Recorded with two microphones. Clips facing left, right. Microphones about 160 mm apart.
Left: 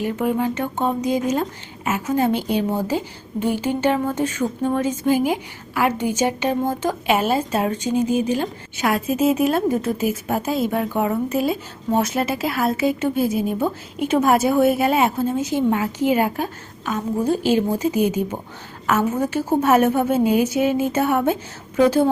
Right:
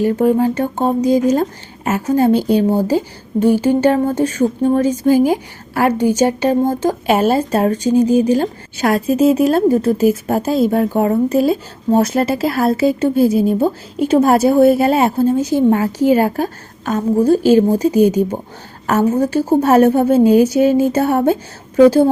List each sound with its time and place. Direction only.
0.0 s speech: 35° right (ahead or behind)